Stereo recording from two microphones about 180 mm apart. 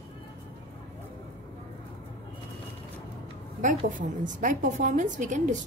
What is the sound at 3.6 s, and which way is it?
A woman's voice, 45° right (ahead or behind).